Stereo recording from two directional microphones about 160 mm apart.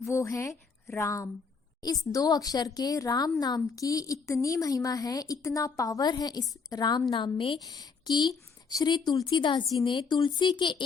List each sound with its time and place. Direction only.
0.1 s a woman's voice: 20° left (ahead or behind)